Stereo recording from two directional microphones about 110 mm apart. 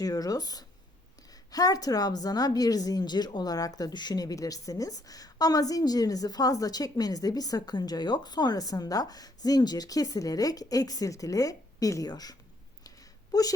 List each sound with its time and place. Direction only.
0.0 s a woman's voice: 35° left (ahead or behind)